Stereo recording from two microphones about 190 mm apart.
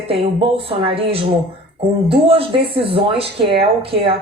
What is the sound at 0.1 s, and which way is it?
Speech, 30° right (ahead or behind).